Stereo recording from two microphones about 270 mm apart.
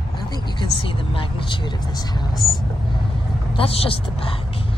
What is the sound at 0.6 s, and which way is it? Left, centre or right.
Speech, centre.